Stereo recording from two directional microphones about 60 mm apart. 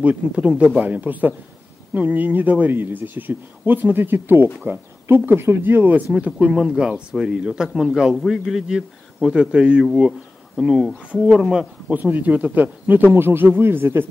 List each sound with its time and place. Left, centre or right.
0.0 s speech: right
6.4 s speech: centre
11.9 s speech: right